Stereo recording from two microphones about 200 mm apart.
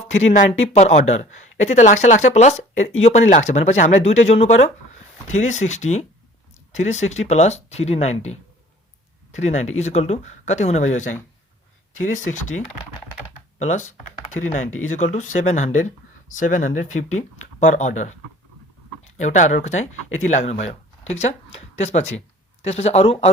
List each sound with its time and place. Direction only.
0.7 s speech: 35° left (ahead or behind)
19.1 s speech: 35° left (ahead or behind)